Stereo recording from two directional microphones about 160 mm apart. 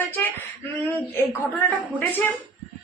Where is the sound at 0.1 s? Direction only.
15° left (ahead or behind).